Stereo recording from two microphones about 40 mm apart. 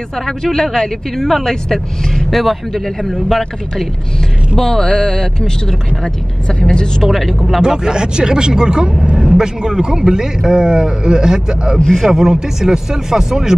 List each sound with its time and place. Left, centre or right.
0.4 s speech: centre
7.6 s a man's voice: centre
11.9 s a man's voice: centre